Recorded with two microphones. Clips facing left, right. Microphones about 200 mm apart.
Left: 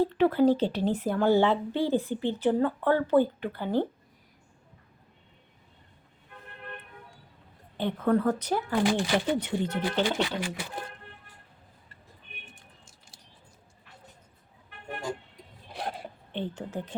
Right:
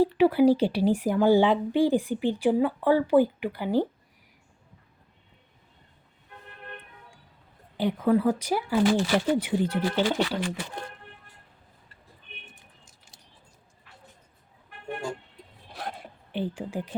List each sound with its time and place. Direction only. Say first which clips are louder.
0.0 s speech: right 3 dB; 10° right (ahead or behind)
7.8 s speech: right 2 dB; 10° right (ahead or behind)
8.9 s speech: right 2 dB; 15° left (ahead or behind)
9.4 s speech: right 3 dB; 10° right (ahead or behind)
10.0 s speech: right 2 dB; 15° left (ahead or behind)
16.3 s speech: right 3 dB; 10° right (ahead or behind)